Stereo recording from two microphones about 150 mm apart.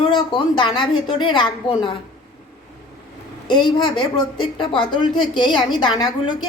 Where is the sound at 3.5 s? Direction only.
30° left (ahead or behind).